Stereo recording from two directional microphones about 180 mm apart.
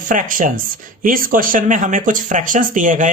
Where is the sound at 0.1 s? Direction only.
50° right (ahead or behind).